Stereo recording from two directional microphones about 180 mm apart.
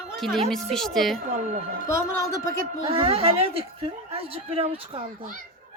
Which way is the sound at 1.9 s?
15° left (ahead or behind).